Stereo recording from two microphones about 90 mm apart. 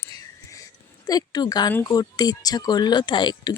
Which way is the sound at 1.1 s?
45° left (ahead or behind).